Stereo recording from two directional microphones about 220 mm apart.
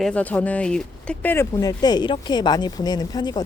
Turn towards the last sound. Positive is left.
turn(degrees=20)  # may be behind; listen again after turning